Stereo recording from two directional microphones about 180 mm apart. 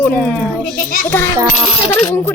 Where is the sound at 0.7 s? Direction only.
50° left (ahead or behind).